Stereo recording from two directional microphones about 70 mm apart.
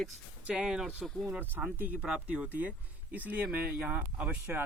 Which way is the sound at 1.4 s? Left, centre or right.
Right.